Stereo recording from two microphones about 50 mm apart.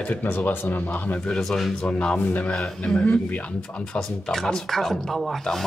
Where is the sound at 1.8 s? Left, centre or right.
Centre.